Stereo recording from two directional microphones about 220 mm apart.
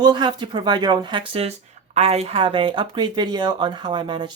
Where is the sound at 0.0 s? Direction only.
20° right (ahead or behind).